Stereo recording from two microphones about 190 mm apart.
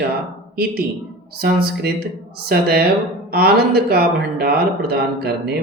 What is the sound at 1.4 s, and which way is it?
Speech, 55° right (ahead or behind).